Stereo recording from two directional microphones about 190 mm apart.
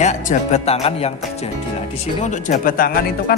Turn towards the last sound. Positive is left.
turn(degrees=50)  # may be behind; listen again after turning